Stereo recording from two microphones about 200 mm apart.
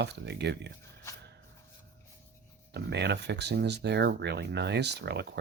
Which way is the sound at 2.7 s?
55° right (ahead or behind).